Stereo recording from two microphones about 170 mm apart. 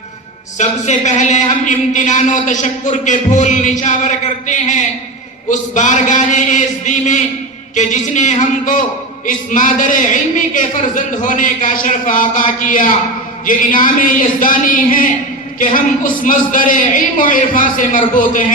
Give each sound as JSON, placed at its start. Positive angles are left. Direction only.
{"t": 0.6, "sound": "speech", "side_deg": 45}